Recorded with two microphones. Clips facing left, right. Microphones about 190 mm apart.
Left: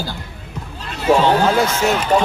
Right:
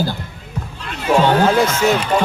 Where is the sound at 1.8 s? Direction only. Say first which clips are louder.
Right 3 dB; centre (ahead or behind).